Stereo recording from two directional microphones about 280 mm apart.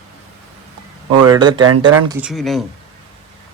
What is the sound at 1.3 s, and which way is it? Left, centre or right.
Speech, centre.